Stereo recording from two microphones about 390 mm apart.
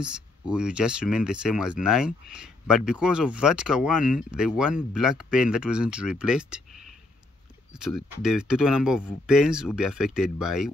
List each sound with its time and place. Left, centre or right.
0.0 s speech: centre
7.7 s speech: centre